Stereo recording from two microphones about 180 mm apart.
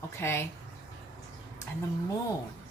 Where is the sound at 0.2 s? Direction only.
15° left (ahead or behind).